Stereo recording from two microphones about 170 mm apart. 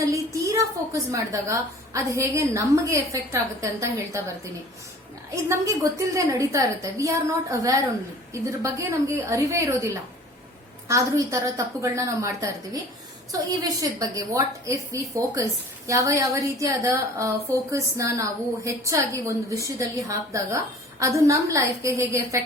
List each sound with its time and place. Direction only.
0.1 s a woman's voice: 20° right (ahead or behind)
5.3 s a woman's voice: 20° right (ahead or behind)
8.3 s a woman's voice: 15° right (ahead or behind)